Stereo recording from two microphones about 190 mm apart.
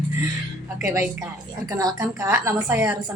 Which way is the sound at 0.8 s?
15° right (ahead or behind).